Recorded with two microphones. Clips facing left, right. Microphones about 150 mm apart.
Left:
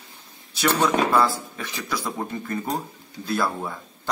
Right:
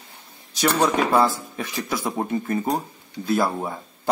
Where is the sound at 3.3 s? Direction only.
20° right (ahead or behind).